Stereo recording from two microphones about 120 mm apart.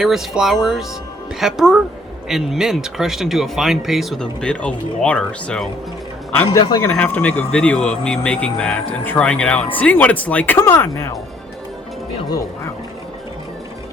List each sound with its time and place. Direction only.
0.0 s speech: centre (ahead or behind)
6.5 s speech: 35° left (ahead or behind)
6.9 s speech: 10° left (ahead or behind)